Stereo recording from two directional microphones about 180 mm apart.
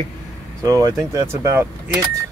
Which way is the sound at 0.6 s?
15° right (ahead or behind).